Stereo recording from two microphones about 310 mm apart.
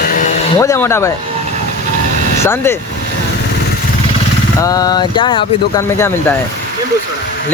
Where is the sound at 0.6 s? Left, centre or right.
Centre.